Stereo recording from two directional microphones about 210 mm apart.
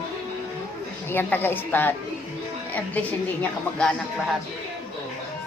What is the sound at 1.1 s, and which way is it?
A woman's voice, 10° left (ahead or behind).